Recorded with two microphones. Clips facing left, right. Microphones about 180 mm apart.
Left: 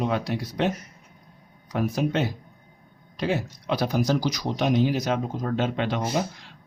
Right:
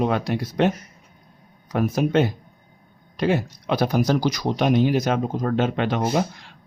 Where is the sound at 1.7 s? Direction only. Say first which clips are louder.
Right 5 dB; 55° right (ahead or behind).